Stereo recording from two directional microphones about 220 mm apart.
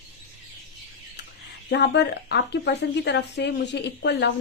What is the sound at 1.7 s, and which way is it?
Speech, 50° left (ahead or behind).